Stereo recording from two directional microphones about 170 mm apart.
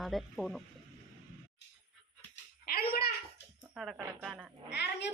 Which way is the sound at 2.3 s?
65° left (ahead or behind).